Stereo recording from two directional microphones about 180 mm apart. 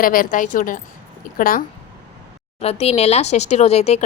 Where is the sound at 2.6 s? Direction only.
35° left (ahead or behind).